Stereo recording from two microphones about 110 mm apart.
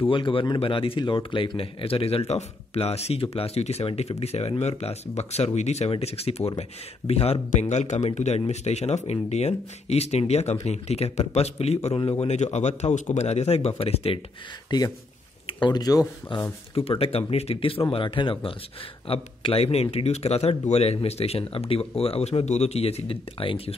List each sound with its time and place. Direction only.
0.0 s speech: 50° left (ahead or behind)
7.6 s speech: 90° left; by 14.2 s 65° left (ahead or behind)
14.7 s speech: 45° left (ahead or behind)
16.3 s speech: 50° left (ahead or behind)
16.7 s speech: 60° left (ahead or behind)